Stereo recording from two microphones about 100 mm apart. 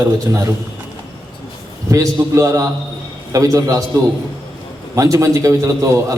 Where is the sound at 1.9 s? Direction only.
30° right (ahead or behind).